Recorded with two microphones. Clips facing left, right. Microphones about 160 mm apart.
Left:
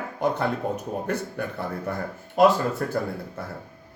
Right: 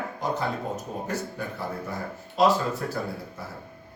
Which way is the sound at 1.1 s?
60° left (ahead or behind).